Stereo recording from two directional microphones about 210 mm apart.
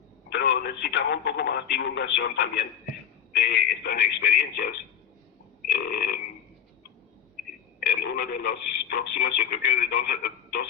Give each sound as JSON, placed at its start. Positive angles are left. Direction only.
{"t": 0.3, "sound": "speech", "side_deg": 50}
{"t": 5.7, "sound": "speech", "side_deg": 45}
{"t": 7.8, "sound": "speech", "side_deg": 45}